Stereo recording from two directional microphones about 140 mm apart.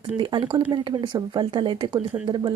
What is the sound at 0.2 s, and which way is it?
Speech, 35° right (ahead or behind).